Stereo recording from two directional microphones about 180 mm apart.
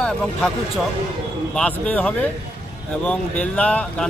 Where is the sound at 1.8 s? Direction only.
5° left (ahead or behind).